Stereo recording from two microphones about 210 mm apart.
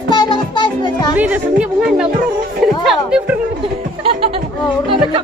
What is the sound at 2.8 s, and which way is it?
Music, 5° right (ahead or behind).